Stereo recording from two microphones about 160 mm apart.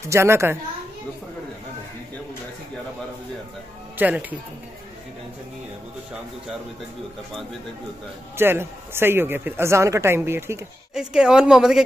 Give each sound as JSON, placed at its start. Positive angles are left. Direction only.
{"t": 0.0, "sound": "speech", "side_deg": -15}
{"t": 4.0, "sound": "speech", "side_deg": -10}
{"t": 8.4, "sound": "speech", "side_deg": -15}
{"t": 11.0, "sound": "speech", "side_deg": -5}